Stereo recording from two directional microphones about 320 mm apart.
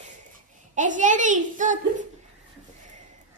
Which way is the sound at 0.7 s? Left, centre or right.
Right.